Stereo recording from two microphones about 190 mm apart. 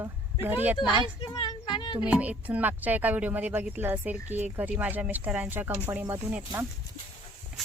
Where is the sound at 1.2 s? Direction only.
20° left (ahead or behind).